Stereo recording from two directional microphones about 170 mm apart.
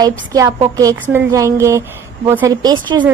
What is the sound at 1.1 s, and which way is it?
A woman's voice, 20° right (ahead or behind).